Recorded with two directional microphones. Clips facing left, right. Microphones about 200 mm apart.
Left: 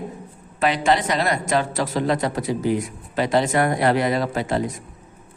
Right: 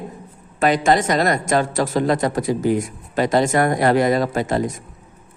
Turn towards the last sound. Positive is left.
turn(degrees=-45)  # may be behind; listen again after turning